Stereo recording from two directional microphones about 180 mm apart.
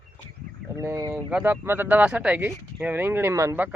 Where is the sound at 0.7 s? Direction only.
20° right (ahead or behind).